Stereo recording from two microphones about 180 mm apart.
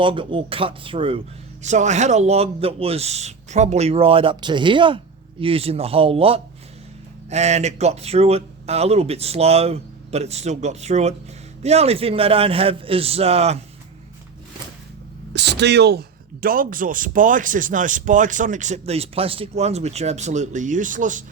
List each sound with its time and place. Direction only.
0.0 s speech: 30° right (ahead or behind)
1.6 s speech: 40° right (ahead or behind)
15.3 s speech: 70° right (ahead or behind); by 21.2 s 45° right (ahead or behind)